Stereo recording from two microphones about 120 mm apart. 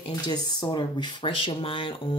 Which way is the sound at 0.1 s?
35° left (ahead or behind).